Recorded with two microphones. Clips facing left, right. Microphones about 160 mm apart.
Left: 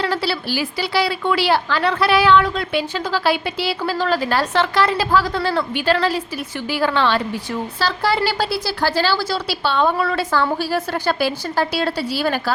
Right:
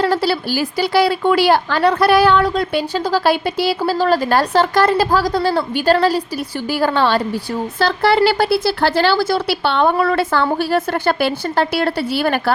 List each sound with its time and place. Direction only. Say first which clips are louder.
0.0 s a woman's voice: right 5 dB; 45° right (ahead or behind)
7.8 s a woman's voice: right 6 dB; 55° right (ahead or behind)